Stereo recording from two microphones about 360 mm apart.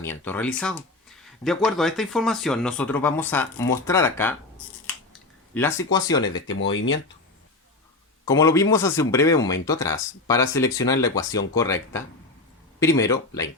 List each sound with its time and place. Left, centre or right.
0.0 s speech: centre
5.5 s speech: centre
6.2 s speech: left
8.3 s speech: centre